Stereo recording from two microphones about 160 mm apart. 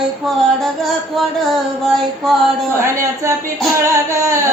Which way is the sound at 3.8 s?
20° right (ahead or behind).